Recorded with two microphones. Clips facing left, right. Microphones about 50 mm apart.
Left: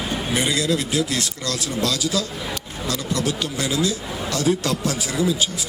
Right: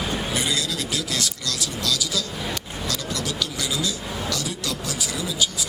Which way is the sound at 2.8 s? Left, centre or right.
Left.